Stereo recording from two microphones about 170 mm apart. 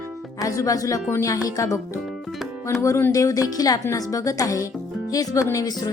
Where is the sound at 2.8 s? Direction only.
20° left (ahead or behind).